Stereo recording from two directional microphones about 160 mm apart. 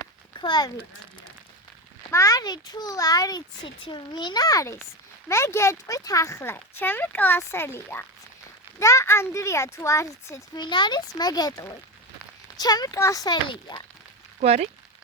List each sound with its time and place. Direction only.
0.3 s speech: 30° left (ahead or behind)
2.0 s a child's voice: 20° left (ahead or behind)
14.4 s speech: 45° right (ahead or behind)